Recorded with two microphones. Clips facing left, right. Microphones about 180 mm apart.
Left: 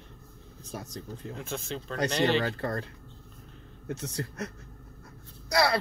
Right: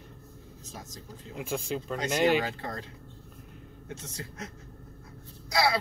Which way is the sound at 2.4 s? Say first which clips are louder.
Left 5 dB; 60° left (ahead or behind).